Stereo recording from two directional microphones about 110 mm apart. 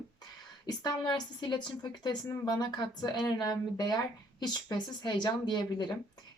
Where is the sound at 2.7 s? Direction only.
40° left (ahead or behind).